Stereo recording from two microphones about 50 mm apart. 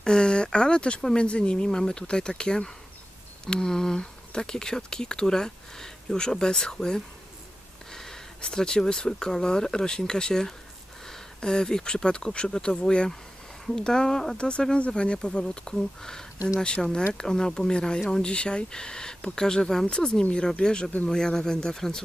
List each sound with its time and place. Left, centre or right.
0.0 s speech: centre
7.9 s a sound: centre
8.4 s speech: centre
14.3 s speech: left